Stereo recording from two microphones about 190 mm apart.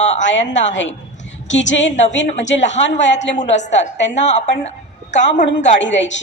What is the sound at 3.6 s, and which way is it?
Speech, 40° left (ahead or behind).